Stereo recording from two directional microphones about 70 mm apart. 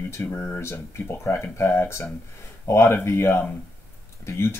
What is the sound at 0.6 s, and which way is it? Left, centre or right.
Speech, left.